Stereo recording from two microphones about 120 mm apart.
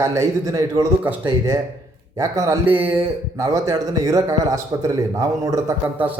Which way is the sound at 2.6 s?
15° right (ahead or behind).